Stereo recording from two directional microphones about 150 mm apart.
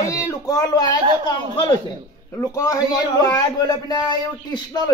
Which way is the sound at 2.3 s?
20° left (ahead or behind).